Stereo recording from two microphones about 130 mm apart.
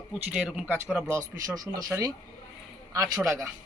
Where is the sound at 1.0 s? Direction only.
25° right (ahead or behind).